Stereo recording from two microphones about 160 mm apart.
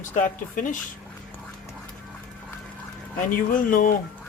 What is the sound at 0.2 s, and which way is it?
Speech, 55° left (ahead or behind).